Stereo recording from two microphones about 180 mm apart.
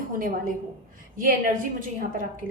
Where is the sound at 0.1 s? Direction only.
50° right (ahead or behind).